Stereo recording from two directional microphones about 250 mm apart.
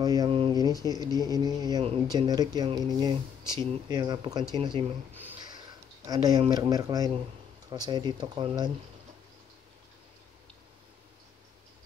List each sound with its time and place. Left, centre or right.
0.0 s a sound: centre
0.8 s speech: centre
6.0 s speech: centre